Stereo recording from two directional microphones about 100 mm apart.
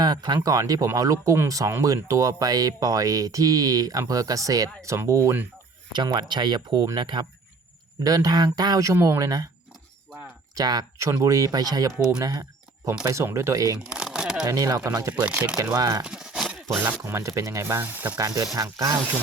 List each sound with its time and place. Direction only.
0.0 s speech: 45° right (ahead or behind)
6.1 s speech: 50° right (ahead or behind)
8.0 s speech: 40° right (ahead or behind)
10.5 s speech: 40° right (ahead or behind)
12.2 s a sound: 35° right (ahead or behind)
13.1 s speech: 30° right (ahead or behind)
13.9 s shuffling cards: 10° right (ahead or behind)
14.4 s speech: 40° right (ahead or behind)
15.2 s speech: 15° right (ahead or behind)
15.8 s speech: 40° right (ahead or behind)
16.0 s a sound: 5° right (ahead or behind)
17.0 s speech: 30° right (ahead or behind)
18.2 s speech: 35° right (ahead or behind)